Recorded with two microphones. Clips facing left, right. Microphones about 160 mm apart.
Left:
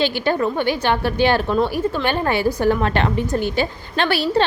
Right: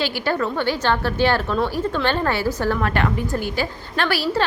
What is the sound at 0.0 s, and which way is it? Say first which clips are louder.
A woman's voice: left 3 dB; 20° left (ahead or behind).